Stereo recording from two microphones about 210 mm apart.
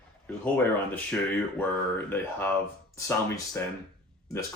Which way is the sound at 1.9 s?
10° left (ahead or behind).